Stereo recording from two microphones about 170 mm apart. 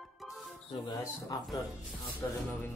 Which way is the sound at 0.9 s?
20° left (ahead or behind).